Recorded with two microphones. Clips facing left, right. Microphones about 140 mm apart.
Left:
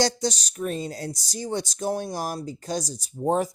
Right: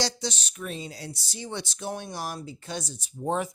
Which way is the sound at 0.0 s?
45° left (ahead or behind).